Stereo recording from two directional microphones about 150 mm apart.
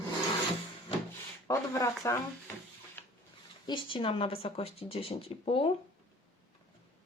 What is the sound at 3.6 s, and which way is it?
Speech, 30° left (ahead or behind).